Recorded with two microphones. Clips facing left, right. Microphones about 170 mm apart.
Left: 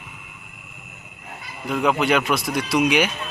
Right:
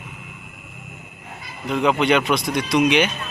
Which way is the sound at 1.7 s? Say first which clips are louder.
Right 2 dB; 5° left (ahead or behind).